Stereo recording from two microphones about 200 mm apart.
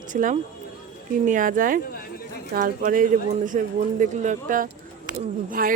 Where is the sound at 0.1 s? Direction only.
40° right (ahead or behind).